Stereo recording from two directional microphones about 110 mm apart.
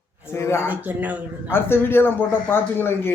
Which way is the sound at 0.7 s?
15° right (ahead or behind).